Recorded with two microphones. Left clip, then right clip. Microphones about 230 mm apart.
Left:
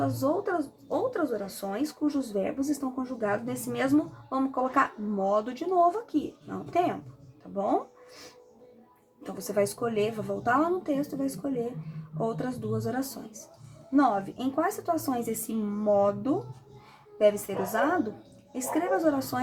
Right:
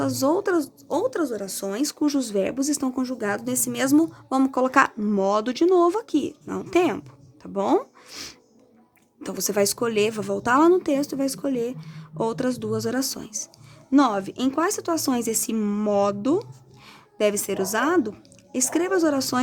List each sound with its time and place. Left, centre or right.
0.0 s speech: right